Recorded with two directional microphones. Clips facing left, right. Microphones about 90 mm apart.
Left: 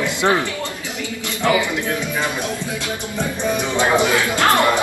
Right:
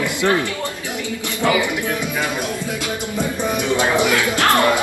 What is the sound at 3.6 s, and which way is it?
Speech, 20° left (ahead or behind).